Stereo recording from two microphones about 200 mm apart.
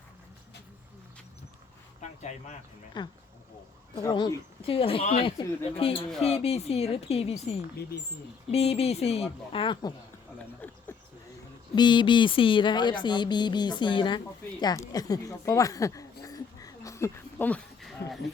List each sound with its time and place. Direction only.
2.0 s a sound: 35° left (ahead or behind)
3.0 s speech: 20° left (ahead or behind)
7.8 s speech: 55° left (ahead or behind)
8.4 s speech: 30° left (ahead or behind)
10.6 s speech: 10° left (ahead or behind)
11.7 s speech: 25° left (ahead or behind)
16.2 s a sound: 15° left (ahead or behind)